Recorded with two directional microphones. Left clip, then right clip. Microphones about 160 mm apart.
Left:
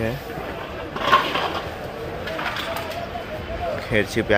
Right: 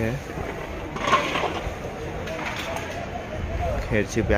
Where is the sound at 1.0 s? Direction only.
20° right (ahead or behind).